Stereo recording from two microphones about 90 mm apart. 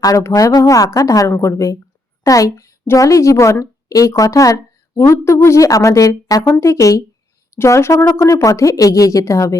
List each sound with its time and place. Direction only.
0.0 s a woman's voice: 35° left (ahead or behind)
6.4 s a woman's voice: 30° left (ahead or behind)